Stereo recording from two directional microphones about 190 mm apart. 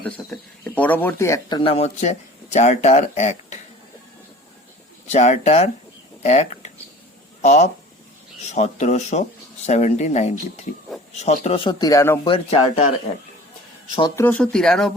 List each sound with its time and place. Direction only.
0.0 s speech: 10° left (ahead or behind); by 3.6 s 40° left (ahead or behind)
5.0 s speech: 35° left (ahead or behind); by 12.3 s 15° left (ahead or behind)
12.3 s speech: 30° left (ahead or behind)
14.2 s speech: 10° left (ahead or behind)